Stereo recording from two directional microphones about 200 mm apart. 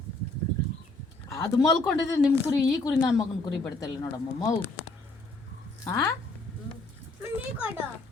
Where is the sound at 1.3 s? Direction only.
15° left (ahead or behind).